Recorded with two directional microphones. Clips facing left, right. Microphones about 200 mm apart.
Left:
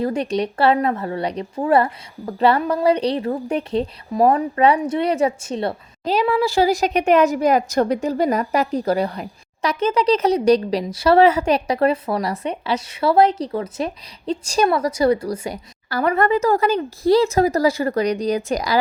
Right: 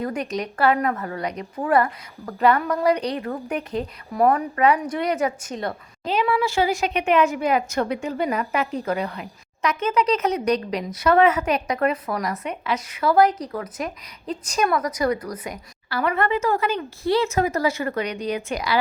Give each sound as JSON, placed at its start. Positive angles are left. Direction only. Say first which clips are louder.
{"t": 0.0, "sound": "a woman's voice", "louder": "left 5 dB", "side_deg": 30}